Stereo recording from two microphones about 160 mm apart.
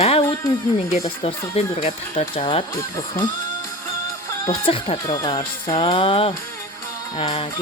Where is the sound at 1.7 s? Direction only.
40° left (ahead or behind).